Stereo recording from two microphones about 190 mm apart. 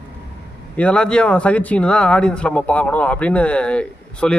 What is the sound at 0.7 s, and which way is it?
Speech, 5° left (ahead or behind).